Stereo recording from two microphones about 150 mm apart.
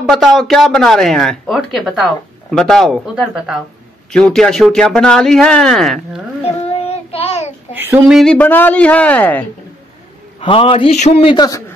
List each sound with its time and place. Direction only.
0.1 s speech: centre (ahead or behind)
6.4 s child singing: 40° left (ahead or behind)
7.7 s speech: 15° right (ahead or behind)
8.1 s speech: 5° left (ahead or behind)
10.4 s a man's voice: 35° left (ahead or behind)
11.3 s a man's voice: 25° left (ahead or behind)